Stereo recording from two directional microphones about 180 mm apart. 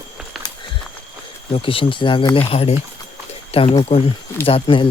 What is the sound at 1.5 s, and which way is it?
Speech, 30° left (ahead or behind).